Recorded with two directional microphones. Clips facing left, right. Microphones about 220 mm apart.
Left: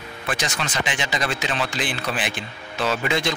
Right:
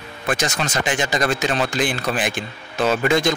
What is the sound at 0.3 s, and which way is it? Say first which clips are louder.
Speech: right 5 dB; 45° right (ahead or behind).